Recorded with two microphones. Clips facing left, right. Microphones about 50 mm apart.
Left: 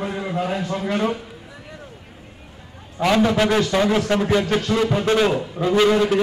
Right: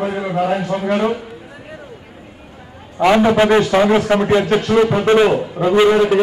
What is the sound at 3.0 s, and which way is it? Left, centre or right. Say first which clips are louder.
A man's voice: right 5 dB; right.